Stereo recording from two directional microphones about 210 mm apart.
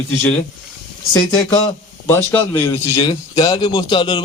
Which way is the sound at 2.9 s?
25° left (ahead or behind).